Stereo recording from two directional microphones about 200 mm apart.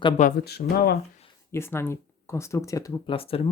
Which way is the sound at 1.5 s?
10° left (ahead or behind).